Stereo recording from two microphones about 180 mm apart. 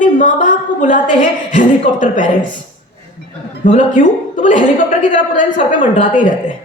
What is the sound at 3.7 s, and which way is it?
A woman's voice, 45° left (ahead or behind).